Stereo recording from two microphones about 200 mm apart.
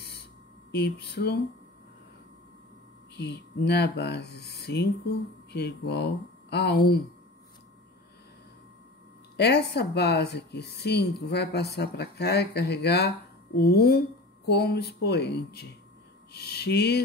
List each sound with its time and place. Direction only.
0.7 s a woman's voice: 55° left (ahead or behind)
3.2 s a woman's voice: 55° left (ahead or behind)
9.4 s a woman's voice: 55° left (ahead or behind)